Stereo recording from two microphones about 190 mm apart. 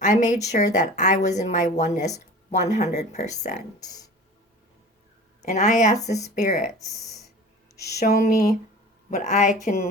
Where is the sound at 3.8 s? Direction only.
20° left (ahead or behind).